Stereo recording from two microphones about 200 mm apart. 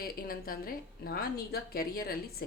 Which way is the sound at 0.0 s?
45° left (ahead or behind).